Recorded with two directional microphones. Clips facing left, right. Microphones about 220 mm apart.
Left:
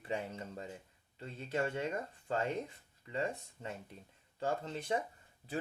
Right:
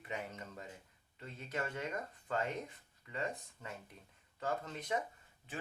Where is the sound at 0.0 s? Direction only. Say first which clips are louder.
Left 5 dB; 30° left (ahead or behind).